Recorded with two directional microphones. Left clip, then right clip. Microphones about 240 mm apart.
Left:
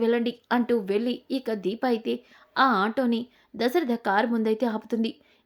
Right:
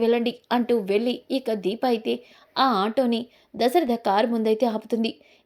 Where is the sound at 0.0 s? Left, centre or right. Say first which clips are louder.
Right 3 dB; centre.